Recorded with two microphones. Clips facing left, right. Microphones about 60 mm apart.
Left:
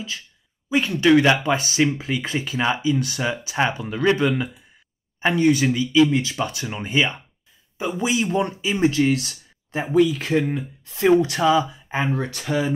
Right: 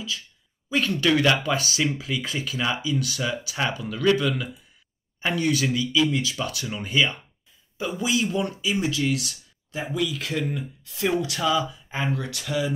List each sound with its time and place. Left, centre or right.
0.7 s speech: centre; by 12.7 s left